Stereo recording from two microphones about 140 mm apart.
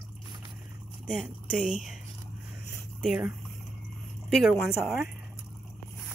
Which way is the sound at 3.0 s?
5° right (ahead or behind).